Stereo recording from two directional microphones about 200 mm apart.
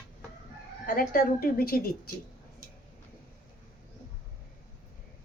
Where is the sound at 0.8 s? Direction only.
45° left (ahead or behind).